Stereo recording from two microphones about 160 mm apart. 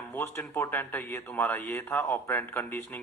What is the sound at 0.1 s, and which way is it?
Speech, 10° left (ahead or behind).